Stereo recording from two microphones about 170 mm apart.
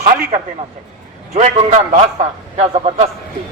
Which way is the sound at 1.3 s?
45° right (ahead or behind).